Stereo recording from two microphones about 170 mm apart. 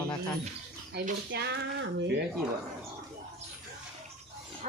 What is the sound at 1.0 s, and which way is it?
Speech, 65° right (ahead or behind).